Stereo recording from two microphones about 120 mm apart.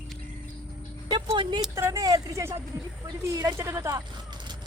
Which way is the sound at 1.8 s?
25° right (ahead or behind).